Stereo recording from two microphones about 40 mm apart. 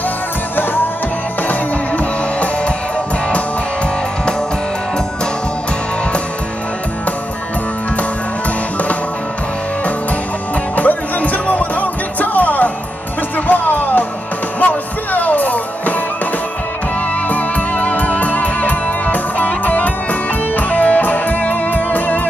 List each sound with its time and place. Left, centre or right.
1.5 s music: left
10.8 s music: left
17.3 s music: left